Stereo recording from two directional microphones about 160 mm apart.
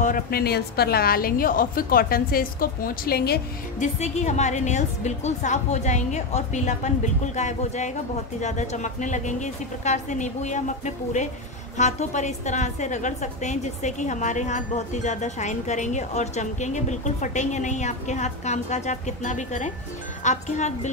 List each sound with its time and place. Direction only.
0.0 s a woman's voice: 65° left (ahead or behind)
3.8 s a woman's voice: 45° left (ahead or behind)